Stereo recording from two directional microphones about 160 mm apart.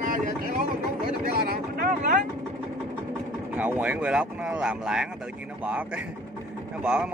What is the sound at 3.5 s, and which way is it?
Speech, 10° right (ahead or behind).